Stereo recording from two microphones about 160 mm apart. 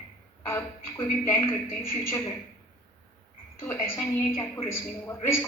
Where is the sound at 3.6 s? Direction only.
15° left (ahead or behind).